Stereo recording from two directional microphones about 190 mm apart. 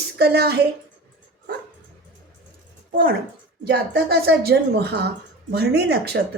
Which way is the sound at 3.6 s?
55° right (ahead or behind).